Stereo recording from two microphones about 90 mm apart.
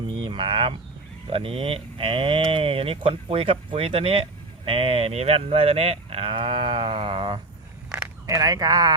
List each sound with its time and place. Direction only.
0.1 s speech: 65° right (ahead or behind)
1.3 s speech: 90° right; by 7.3 s 70° right (ahead or behind)
8.3 s speech: 40° right (ahead or behind)